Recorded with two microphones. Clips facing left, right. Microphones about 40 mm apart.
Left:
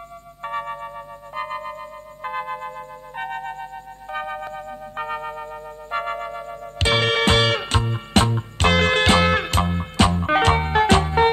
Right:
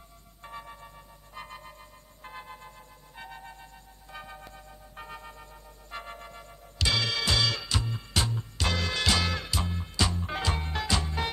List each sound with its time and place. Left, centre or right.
0.4 s music: left
6.3 s music: left
9.0 s music: left